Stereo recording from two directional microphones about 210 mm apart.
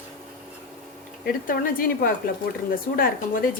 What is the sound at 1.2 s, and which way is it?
A woman's voice, 40° left (ahead or behind).